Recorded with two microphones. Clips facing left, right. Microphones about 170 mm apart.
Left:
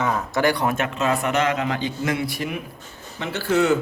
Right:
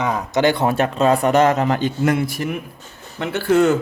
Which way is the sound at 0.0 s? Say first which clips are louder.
Right 3 dB; 15° right (ahead or behind).